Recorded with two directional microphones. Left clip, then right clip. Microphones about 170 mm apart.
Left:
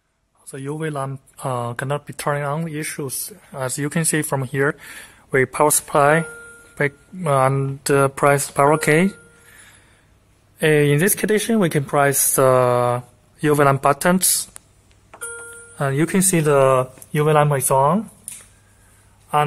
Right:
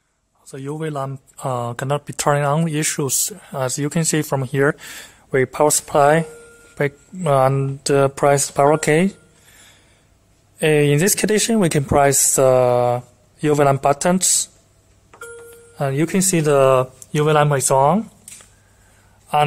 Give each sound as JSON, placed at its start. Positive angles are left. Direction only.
{"t": 0.7, "sound": "speech", "side_deg": -10}
{"t": 2.0, "sound": "speech", "side_deg": -30}
{"t": 2.6, "sound": "speech", "side_deg": -45}
{"t": 3.5, "sound": "speech", "side_deg": -20}
{"t": 10.6, "sound": "speech", "side_deg": -15}
{"t": 12.4, "sound": "speech", "side_deg": 0}
{"t": 15.7, "sound": "speech", "side_deg": 0}